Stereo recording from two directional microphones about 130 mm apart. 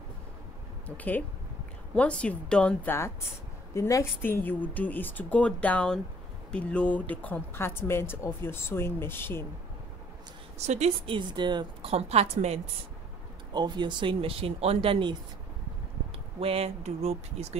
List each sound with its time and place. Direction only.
0.8 s a woman's voice: 10° left (ahead or behind)
10.6 s a woman's voice: 60° right (ahead or behind)
11.1 s speech: 35° right (ahead or behind)
11.9 s a woman's voice: 55° right (ahead or behind)
13.5 s speech: 35° right (ahead or behind)
16.3 s speech: 50° right (ahead or behind)